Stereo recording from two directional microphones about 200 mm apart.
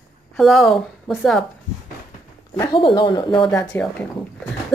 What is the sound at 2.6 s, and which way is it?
Speech, 25° left (ahead or behind).